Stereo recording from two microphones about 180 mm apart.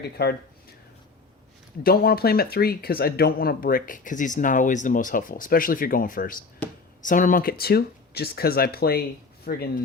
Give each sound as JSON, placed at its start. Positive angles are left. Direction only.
{"t": 0.0, "sound": "speech", "side_deg": 60}
{"t": 1.8, "sound": "speech", "side_deg": 55}